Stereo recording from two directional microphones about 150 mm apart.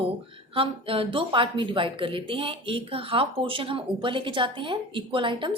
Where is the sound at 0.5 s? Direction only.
40° right (ahead or behind).